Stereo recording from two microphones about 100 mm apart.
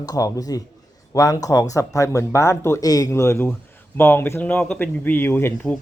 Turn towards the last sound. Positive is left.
turn(degrees=20)  # may be behind; listen again after turning